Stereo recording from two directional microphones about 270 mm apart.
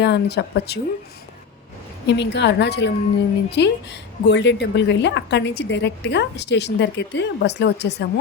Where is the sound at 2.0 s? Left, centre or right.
Left.